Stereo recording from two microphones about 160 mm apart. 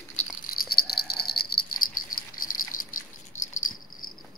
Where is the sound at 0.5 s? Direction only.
70° left (ahead or behind).